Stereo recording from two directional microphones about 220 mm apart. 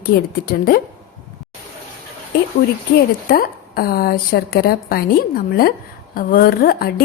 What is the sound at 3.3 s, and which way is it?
A woman's voice, 45° left (ahead or behind).